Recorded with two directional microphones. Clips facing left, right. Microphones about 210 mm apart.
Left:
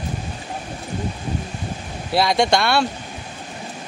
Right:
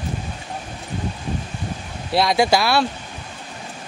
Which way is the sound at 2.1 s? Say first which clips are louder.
Even; centre (ahead or behind).